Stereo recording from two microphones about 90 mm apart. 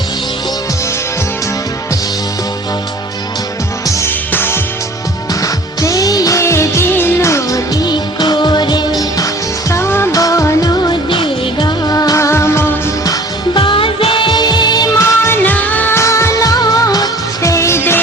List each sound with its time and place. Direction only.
3.8 s music: 35° left (ahead or behind)
4.3 s music: 25° left (ahead or behind)
5.3 s music: 40° left (ahead or behind)
6.4 s music: 30° left (ahead or behind)
7.8 s music: 55° left (ahead or behind)
9.0 s music: 40° left (ahead or behind)
10.2 s music: 40° left (ahead or behind)
11.1 s music: 70° left (ahead or behind)
11.9 s music: 45° left (ahead or behind)
13.6 s music: 70° left (ahead or behind); by 14.8 s 50° left (ahead or behind)
14.9 s music: 30° left (ahead or behind)
16.0 s music: 30° left (ahead or behind)